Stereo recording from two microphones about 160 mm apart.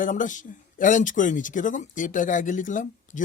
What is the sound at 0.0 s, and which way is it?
Speech, 55° left (ahead or behind).